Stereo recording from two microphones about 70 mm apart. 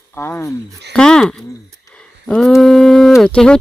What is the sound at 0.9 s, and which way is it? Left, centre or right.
Speech, centre.